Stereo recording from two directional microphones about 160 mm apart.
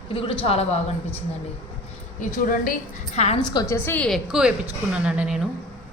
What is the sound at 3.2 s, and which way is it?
Speech, 40° left (ahead or behind).